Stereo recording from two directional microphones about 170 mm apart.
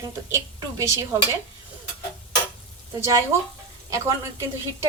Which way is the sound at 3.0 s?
15° right (ahead or behind).